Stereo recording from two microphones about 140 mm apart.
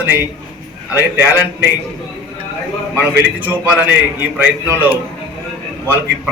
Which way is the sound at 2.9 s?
10° right (ahead or behind).